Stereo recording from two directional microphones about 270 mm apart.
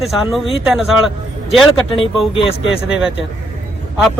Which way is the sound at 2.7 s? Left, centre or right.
Centre.